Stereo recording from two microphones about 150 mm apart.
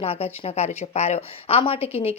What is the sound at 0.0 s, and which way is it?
A woman's voice, 40° left (ahead or behind).